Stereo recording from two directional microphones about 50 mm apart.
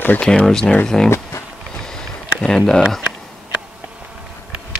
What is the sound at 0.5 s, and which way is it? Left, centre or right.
Speech, centre.